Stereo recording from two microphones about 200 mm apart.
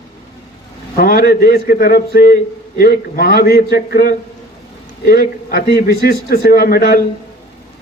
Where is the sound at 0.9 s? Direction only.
50° left (ahead or behind).